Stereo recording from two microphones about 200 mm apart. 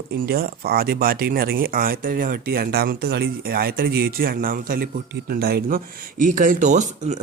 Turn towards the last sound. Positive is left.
turn(degrees=-35)  # may be behind; listen again after turning